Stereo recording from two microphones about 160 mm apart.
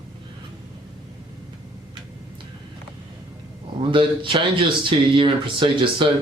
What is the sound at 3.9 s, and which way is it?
Speech, 30° right (ahead or behind).